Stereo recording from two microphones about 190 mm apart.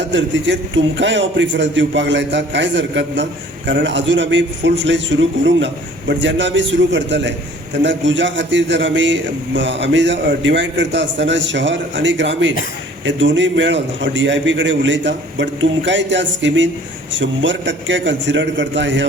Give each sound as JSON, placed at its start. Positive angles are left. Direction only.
{"t": 0.1, "sound": "a man's voice", "side_deg": -70}